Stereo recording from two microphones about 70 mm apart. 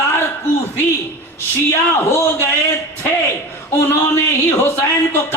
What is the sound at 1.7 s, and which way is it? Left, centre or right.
Speech, left.